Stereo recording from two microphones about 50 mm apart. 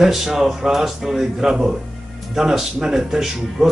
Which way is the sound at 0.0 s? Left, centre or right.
Centre.